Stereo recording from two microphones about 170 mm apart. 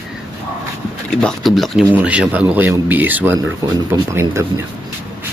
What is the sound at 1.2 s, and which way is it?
Speech, centre (ahead or behind).